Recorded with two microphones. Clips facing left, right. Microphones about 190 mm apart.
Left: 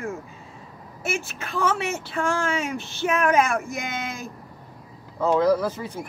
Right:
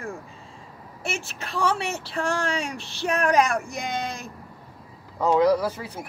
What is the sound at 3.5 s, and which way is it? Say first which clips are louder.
Speech: left 1 dB; centre (ahead or behind).